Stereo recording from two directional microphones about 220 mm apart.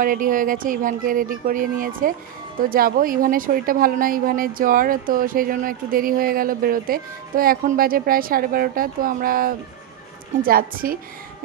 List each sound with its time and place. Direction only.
0.0 s a woman's voice: 40° right (ahead or behind)